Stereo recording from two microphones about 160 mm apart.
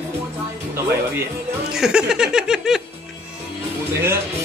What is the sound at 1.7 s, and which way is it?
Speech, 5° right (ahead or behind).